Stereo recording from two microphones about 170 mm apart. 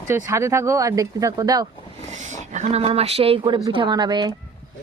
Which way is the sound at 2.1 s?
45° right (ahead or behind).